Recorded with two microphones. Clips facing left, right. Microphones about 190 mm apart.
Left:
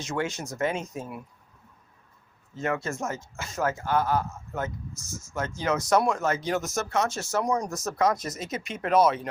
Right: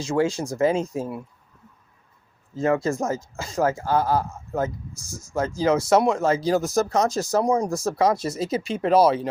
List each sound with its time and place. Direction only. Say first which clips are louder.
0.0 s speech: right 8 dB; 30° right (ahead or behind)
2.6 s speech: right 7 dB; 35° right (ahead or behind)